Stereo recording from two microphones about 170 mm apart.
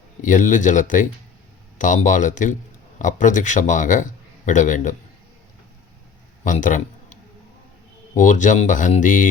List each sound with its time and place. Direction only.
0.2 s a man's voice: 50° left (ahead or behind)
6.4 s a sound: 50° left (ahead or behind)
8.1 s a man's voice: 50° left (ahead or behind)